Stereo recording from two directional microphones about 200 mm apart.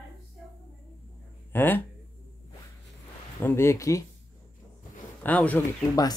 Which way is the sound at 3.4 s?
15° left (ahead or behind).